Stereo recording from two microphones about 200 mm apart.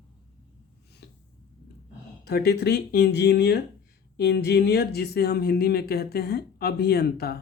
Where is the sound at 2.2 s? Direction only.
50° left (ahead or behind).